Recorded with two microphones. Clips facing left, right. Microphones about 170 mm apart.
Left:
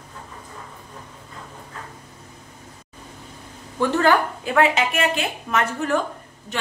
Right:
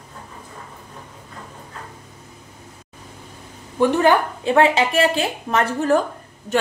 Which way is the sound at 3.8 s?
15° right (ahead or behind).